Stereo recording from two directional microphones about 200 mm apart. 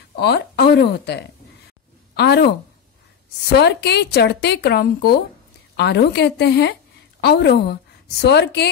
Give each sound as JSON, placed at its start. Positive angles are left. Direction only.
{"t": 0.2, "sound": "a woman's voice", "side_deg": 55}
{"t": 3.5, "sound": "speech", "side_deg": 55}